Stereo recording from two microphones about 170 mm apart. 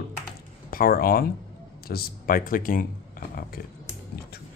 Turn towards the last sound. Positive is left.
turn(degrees=55)  # may be behind; listen again after turning